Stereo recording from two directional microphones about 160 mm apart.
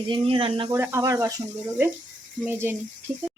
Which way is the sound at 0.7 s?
20° right (ahead or behind).